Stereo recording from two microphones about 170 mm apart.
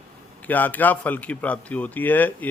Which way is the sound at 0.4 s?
10° left (ahead or behind).